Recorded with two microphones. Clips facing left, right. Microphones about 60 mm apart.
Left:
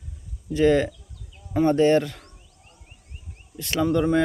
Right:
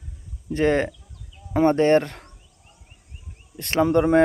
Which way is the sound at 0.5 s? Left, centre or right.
Right.